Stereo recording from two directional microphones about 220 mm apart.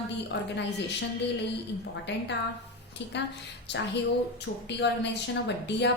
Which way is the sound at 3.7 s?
50° left (ahead or behind).